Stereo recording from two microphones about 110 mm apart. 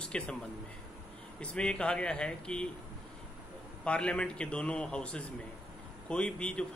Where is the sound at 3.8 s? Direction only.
10° left (ahead or behind).